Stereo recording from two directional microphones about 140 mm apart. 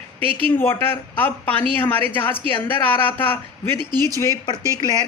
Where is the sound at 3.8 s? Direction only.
30° right (ahead or behind).